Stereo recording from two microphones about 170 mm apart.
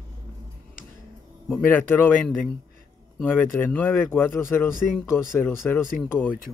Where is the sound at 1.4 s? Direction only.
10° left (ahead or behind).